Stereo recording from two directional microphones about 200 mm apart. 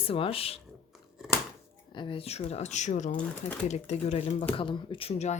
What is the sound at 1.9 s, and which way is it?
Speech, 25° left (ahead or behind).